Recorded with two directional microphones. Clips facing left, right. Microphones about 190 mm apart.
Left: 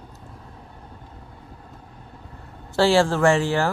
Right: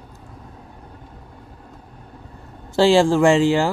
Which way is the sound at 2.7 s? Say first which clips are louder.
Right 4 dB; 15° right (ahead or behind).